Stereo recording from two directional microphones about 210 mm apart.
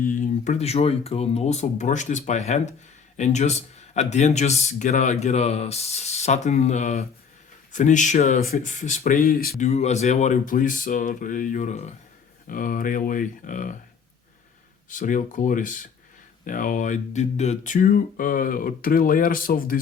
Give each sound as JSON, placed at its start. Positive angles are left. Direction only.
{"t": 0.0, "sound": "speech", "side_deg": 40}
{"t": 9.6, "sound": "speech", "side_deg": 30}
{"t": 14.8, "sound": "speech", "side_deg": 40}